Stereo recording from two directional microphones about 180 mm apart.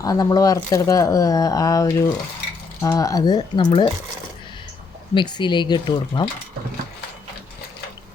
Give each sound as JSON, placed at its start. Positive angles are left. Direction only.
{"t": 0.0, "sound": "speech", "side_deg": 20}
{"t": 5.1, "sound": "speech", "side_deg": 25}